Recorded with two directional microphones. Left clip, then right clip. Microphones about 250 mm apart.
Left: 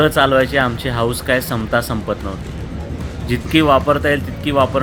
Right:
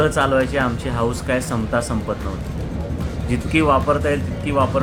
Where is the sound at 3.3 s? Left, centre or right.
Centre.